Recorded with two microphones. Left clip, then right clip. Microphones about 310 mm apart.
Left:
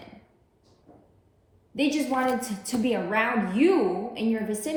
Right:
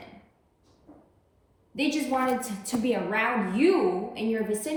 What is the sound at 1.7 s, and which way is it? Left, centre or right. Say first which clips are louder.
A woman's voice: left 1 dB; centre.